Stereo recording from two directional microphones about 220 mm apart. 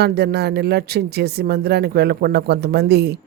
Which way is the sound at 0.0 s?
45° right (ahead or behind).